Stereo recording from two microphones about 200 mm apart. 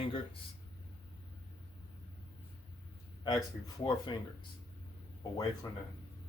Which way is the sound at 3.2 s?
20° left (ahead or behind).